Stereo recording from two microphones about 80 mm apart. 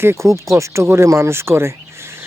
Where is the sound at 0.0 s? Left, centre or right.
Right.